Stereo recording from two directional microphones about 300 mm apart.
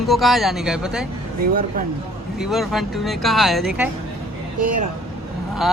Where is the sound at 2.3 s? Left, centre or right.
Centre.